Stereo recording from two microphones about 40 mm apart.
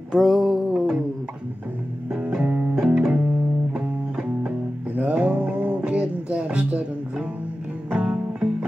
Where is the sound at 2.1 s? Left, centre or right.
Right.